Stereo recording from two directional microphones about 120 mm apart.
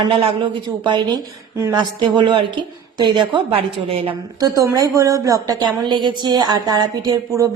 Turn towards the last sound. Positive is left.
turn(degrees=-35)  # may be behind; listen again after turning